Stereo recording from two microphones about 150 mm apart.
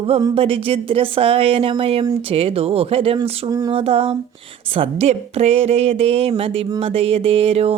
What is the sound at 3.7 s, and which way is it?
Speech, 40° right (ahead or behind).